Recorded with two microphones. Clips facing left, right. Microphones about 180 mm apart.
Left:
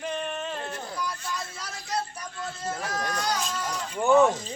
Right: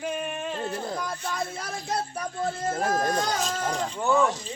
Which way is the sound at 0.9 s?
50° right (ahead or behind).